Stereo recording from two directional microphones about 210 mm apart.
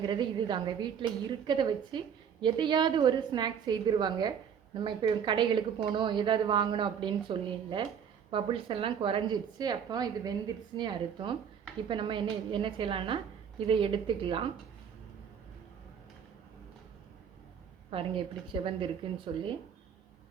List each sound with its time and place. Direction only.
0.0 s a woman's voice: 20° right (ahead or behind)
17.9 s a woman's voice: 25° right (ahead or behind)